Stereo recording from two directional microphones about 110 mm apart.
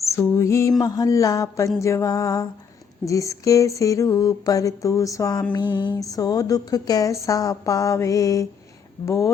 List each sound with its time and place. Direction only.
0.0 s mantra: 25° left (ahead or behind)
0.8 s speech: 35° left (ahead or behind)